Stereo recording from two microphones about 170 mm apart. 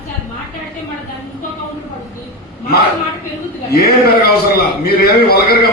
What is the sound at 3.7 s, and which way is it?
A man's voice, 65° left (ahead or behind).